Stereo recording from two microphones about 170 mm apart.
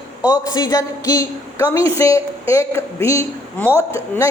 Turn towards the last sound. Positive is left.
turn(degrees=15)  # may be behind; listen again after turning